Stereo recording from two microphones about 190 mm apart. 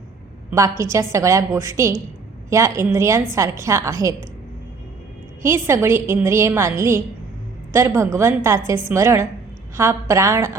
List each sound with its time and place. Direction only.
0.8 s a woman's voice: 15° right (ahead or behind)
5.4 s a woman's voice: 15° right (ahead or behind)